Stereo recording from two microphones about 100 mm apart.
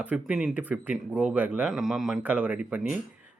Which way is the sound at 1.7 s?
5° right (ahead or behind).